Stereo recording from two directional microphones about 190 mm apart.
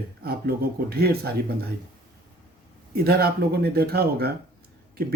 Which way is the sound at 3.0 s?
55° right (ahead or behind).